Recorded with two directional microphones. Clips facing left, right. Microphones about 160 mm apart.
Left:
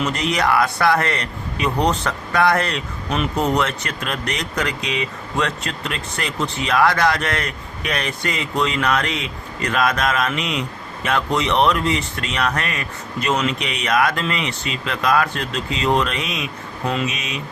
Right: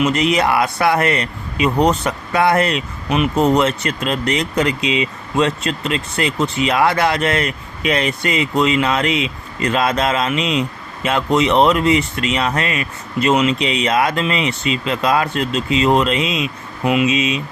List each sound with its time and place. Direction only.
0.0 s speech: 20° right (ahead or behind)